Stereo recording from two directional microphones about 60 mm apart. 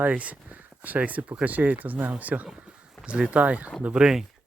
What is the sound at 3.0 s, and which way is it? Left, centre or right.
Speech, centre.